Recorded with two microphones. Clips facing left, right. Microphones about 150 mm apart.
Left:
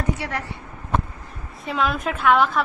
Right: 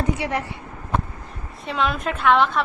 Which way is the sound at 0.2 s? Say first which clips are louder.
Right 4 dB; 20° right (ahead or behind).